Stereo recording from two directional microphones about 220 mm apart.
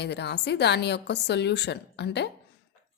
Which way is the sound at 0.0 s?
50° left (ahead or behind).